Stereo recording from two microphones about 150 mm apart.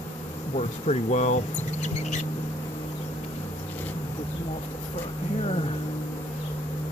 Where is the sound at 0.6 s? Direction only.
50° left (ahead or behind).